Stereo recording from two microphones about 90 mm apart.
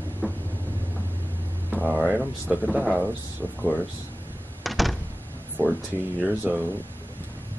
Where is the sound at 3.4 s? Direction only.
15° right (ahead or behind).